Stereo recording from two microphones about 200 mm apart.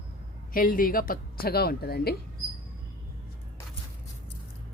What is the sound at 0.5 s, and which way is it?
Speech, 45° left (ahead or behind).